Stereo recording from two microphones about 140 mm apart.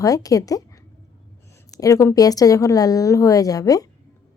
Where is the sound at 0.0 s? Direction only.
25° left (ahead or behind).